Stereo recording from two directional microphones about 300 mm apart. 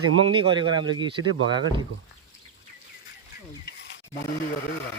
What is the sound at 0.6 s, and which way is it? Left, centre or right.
Speech, centre.